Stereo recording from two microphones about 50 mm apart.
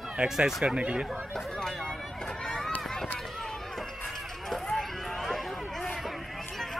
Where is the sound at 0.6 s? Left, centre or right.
Right.